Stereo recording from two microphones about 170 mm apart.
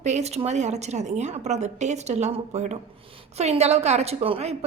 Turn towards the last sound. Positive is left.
turn(degrees=-40)  # may be behind; listen again after turning